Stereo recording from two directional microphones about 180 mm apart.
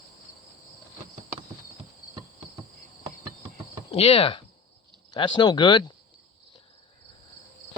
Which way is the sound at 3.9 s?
35° left (ahead or behind).